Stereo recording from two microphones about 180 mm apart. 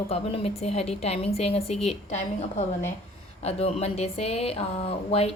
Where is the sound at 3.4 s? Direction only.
35° left (ahead or behind).